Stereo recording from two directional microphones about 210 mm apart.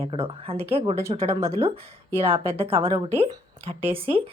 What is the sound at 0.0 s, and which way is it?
A woman's voice, 25° right (ahead or behind).